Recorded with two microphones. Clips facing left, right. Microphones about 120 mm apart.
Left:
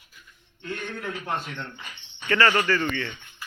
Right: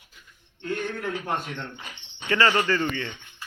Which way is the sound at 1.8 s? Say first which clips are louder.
Right 1 dB; 20° right (ahead or behind).